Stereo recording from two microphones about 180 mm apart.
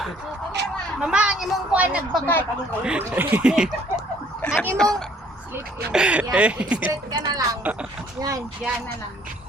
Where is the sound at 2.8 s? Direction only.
5° right (ahead or behind).